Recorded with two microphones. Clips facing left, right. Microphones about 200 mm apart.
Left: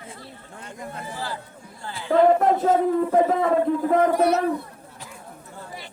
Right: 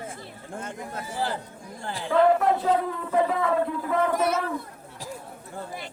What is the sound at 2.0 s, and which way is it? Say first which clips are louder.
Speech: left 3 dB; 40° left (ahead or behind).